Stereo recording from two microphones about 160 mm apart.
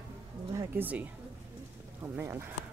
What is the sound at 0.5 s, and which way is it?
Speech, 10° right (ahead or behind).